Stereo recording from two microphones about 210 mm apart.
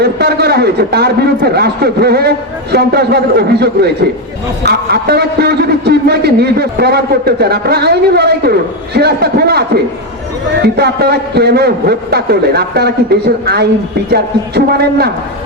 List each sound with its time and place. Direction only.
0.0 s a man's voice: 50° right (ahead or behind)